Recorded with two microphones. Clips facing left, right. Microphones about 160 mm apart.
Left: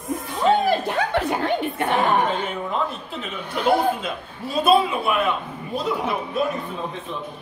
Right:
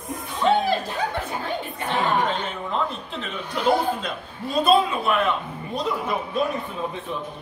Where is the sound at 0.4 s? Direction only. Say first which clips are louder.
Left 1 dB; 5° left (ahead or behind).